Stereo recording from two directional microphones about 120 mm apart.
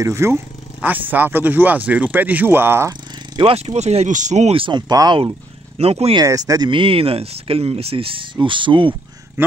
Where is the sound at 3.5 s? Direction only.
65° right (ahead or behind); by 4.5 s 80° right.